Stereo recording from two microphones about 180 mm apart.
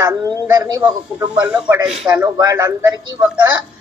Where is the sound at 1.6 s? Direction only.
5° right (ahead or behind).